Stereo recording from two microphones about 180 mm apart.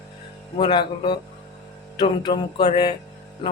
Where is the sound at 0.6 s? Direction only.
25° left (ahead or behind).